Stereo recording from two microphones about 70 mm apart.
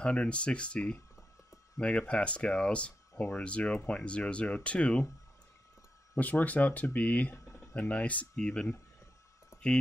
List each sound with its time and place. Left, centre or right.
0.0 s speech: centre
6.1 s speech: left
7.3 s a sound: left
7.7 s speech: centre